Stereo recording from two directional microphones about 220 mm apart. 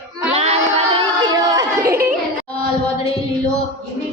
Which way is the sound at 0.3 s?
30° right (ahead or behind).